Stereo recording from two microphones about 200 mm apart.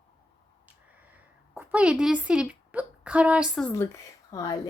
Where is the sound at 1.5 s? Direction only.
5° right (ahead or behind).